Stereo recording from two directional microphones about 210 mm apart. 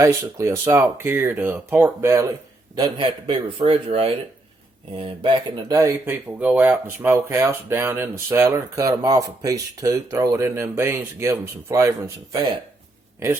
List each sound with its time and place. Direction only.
0.0 s speech: 15° right (ahead or behind)